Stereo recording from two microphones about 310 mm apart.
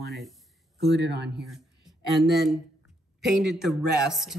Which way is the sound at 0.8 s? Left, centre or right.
Right.